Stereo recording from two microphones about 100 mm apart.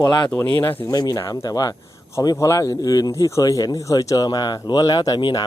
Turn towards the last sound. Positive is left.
turn(degrees=45)  # may be behind; listen again after turning